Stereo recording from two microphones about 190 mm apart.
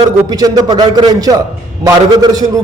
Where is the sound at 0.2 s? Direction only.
20° right (ahead or behind).